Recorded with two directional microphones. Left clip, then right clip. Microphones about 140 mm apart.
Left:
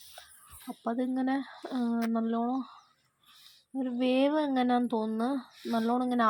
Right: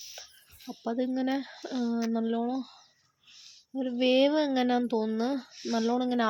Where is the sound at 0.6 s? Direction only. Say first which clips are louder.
Even; 15° left (ahead or behind).